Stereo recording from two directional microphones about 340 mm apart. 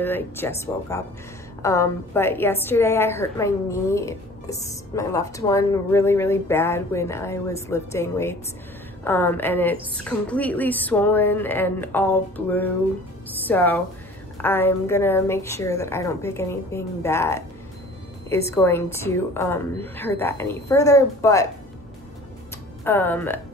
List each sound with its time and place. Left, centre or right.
0.0 s a woman's voice: centre
22.8 s a woman's voice: centre